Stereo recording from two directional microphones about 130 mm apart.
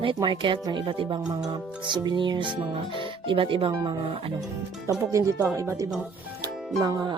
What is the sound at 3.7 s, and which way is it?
Speech, 35° right (ahead or behind).